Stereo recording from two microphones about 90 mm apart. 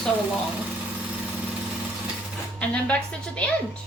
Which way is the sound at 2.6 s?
15° left (ahead or behind).